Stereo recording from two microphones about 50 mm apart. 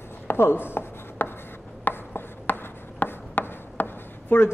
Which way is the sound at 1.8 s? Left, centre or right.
Left.